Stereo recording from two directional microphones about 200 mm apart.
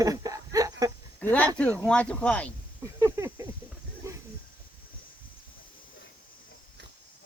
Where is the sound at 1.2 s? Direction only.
10° left (ahead or behind).